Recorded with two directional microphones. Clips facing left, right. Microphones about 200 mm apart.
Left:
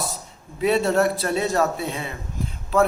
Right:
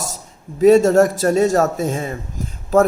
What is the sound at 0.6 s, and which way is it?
A man's voice, 45° right (ahead or behind).